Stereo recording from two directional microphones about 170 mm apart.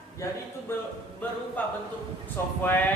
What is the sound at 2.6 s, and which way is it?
Speech, 10° left (ahead or behind).